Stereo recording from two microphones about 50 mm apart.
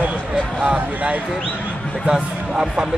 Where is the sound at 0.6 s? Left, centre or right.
Right.